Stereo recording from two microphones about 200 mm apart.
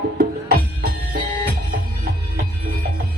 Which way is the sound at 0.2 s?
50° right (ahead or behind).